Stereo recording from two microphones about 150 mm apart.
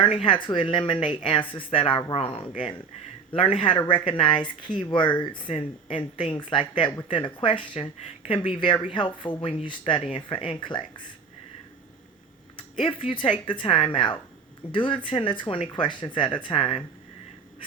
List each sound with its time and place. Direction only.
0.0 s speech: 40° left (ahead or behind)
12.8 s speech: 40° left (ahead or behind)